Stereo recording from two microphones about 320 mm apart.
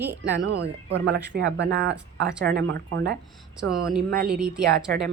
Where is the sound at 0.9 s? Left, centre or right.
Right.